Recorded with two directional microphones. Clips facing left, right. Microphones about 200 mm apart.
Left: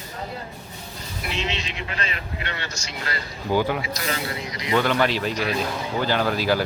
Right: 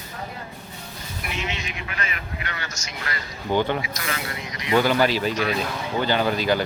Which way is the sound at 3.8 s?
30° left (ahead or behind).